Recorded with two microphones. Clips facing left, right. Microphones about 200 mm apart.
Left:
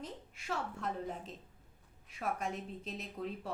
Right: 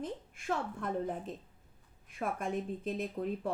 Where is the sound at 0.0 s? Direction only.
50° right (ahead or behind).